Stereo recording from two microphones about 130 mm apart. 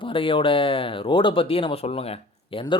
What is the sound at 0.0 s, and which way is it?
Speech, 45° left (ahead or behind).